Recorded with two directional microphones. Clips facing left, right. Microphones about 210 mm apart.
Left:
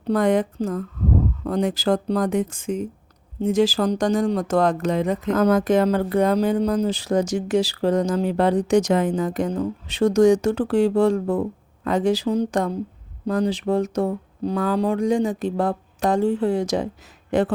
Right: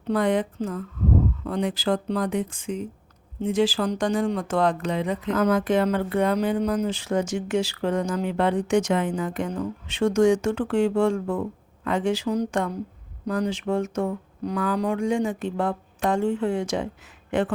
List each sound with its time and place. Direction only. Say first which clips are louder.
0.1 s speech: left 3 dB; 45° left (ahead or behind)